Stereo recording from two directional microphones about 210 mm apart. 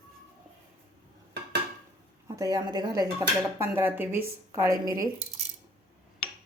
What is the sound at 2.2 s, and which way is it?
Speech, 15° right (ahead or behind).